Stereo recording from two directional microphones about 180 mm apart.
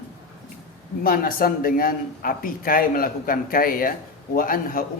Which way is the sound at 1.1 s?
55° left (ahead or behind).